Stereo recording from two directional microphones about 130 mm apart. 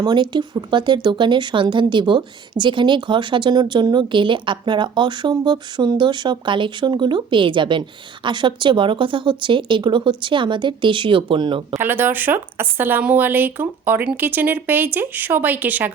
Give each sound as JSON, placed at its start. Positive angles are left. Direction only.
{"t": 0.0, "sound": "speech", "side_deg": -35}
{"t": 11.7, "sound": "speech", "side_deg": -15}